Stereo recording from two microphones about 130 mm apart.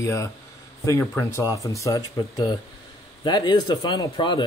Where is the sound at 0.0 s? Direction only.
25° left (ahead or behind).